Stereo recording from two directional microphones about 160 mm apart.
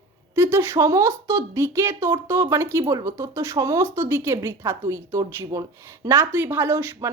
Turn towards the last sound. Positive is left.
turn(degrees=-15)  # may be behind; listen again after turning